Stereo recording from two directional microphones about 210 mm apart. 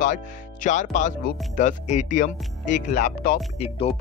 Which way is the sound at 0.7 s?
35° left (ahead or behind).